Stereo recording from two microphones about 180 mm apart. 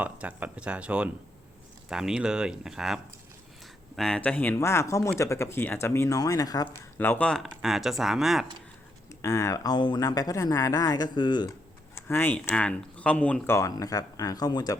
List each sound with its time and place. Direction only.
0.0 s speech: 10° right (ahead or behind)
9.2 s speech: 15° left (ahead or behind)
11.9 s speech: 15° left (ahead or behind)
13.6 s speech: 20° left (ahead or behind)